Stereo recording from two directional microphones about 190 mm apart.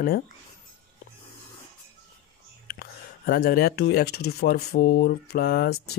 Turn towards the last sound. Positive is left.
turn(degrees=55)  # may be behind; listen again after turning